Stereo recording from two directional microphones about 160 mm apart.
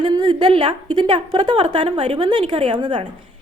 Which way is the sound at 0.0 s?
25° right (ahead or behind).